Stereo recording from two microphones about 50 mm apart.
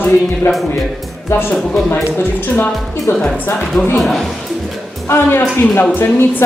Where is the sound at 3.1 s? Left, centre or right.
Left.